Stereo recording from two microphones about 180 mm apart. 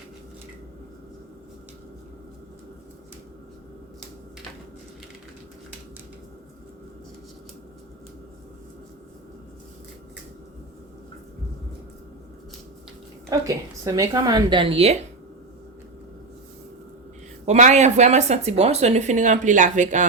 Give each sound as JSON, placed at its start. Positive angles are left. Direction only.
{"t": 13.3, "sound": "a woman's voice", "side_deg": -20}
{"t": 17.4, "sound": "speech", "side_deg": -40}